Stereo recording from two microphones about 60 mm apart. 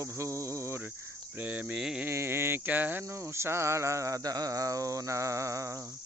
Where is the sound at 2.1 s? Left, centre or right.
Right.